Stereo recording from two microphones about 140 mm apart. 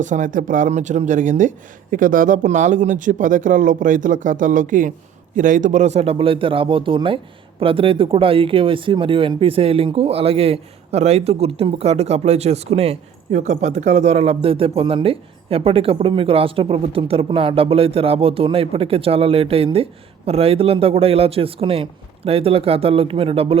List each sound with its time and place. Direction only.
0.0 s a man's voice: 65° right (ahead or behind); by 23.6 s 40° right (ahead or behind)